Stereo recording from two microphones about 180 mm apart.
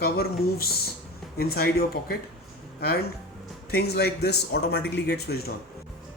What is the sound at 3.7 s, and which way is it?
Speech, 65° left (ahead or behind).